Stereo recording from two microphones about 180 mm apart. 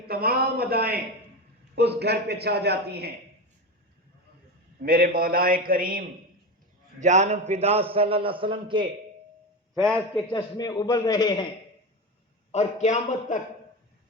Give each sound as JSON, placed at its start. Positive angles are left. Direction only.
{"t": 0.1, "sound": "a man's voice", "side_deg": -60}
{"t": 4.8, "sound": "a man's voice", "side_deg": -55}
{"t": 7.0, "sound": "a man's voice", "side_deg": -40}
{"t": 9.8, "sound": "a man's voice", "side_deg": 5}
{"t": 10.3, "sound": "a man's voice", "side_deg": 20}
{"t": 12.5, "sound": "a man's voice", "side_deg": 40}